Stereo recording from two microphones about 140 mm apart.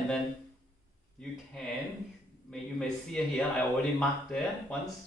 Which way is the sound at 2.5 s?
5° left (ahead or behind).